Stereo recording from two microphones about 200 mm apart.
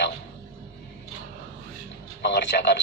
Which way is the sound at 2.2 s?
60° left (ahead or behind).